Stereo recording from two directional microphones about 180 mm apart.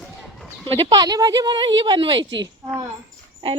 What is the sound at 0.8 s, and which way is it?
Speech, 25° right (ahead or behind).